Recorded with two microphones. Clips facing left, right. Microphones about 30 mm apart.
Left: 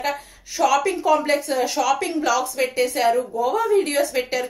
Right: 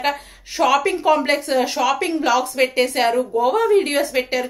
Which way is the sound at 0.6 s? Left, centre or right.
Right.